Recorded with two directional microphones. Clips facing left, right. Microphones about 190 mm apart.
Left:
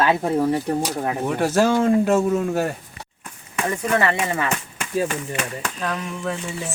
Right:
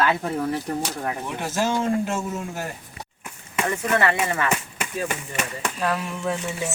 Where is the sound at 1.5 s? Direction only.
55° left (ahead or behind).